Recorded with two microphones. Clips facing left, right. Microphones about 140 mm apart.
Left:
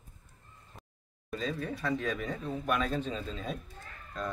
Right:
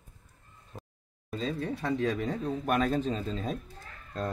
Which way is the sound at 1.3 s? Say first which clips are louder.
Right 2 dB; 30° right (ahead or behind).